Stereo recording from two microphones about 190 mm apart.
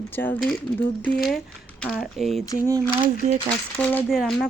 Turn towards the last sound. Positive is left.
turn(degrees=0)  # may be behind; listen again after turning